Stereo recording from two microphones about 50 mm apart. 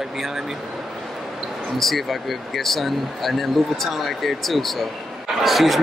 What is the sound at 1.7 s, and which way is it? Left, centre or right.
Speech, centre.